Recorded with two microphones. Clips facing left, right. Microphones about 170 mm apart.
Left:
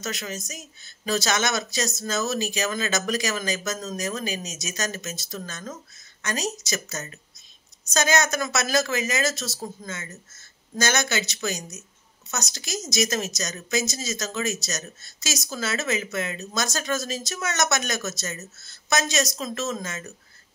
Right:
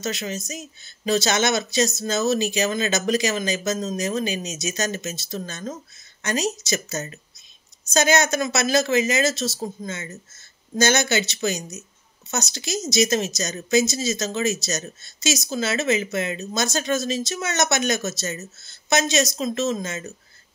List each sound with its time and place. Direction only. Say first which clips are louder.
0.0 s speech: right 4 dB; 25° right (ahead or behind)